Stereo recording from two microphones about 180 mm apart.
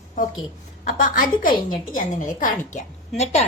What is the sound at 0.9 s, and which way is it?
A woman's voice, 50° left (ahead or behind).